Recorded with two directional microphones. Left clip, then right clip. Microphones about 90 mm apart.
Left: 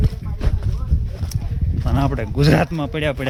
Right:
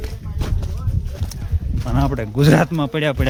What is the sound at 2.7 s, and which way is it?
Speech, 40° right (ahead or behind).